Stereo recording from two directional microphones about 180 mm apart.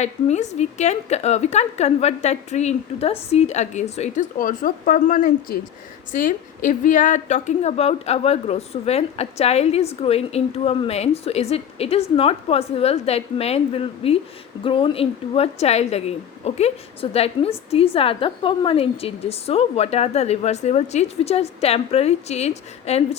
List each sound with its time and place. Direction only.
0.0 s a woman's voice: 40° left (ahead or behind)